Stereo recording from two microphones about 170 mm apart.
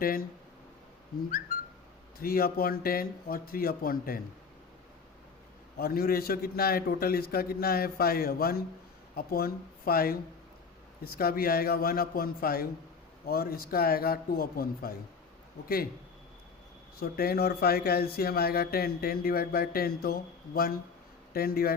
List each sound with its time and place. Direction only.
0.0 s speech: 60° left (ahead or behind)
2.1 s speech: 60° left (ahead or behind)
5.7 s speech: 60° left (ahead or behind)
17.0 s speech: 65° left (ahead or behind)